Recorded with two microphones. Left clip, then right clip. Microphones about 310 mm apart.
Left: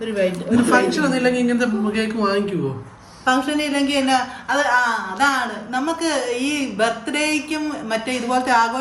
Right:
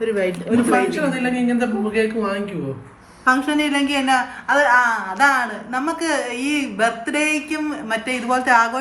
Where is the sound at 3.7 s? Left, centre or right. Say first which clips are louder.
Left 1 dB; centre.